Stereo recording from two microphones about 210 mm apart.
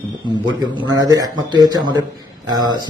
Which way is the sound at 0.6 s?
15° right (ahead or behind).